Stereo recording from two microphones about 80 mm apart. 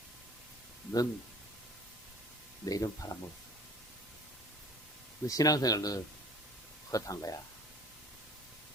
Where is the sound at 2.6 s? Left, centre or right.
Left.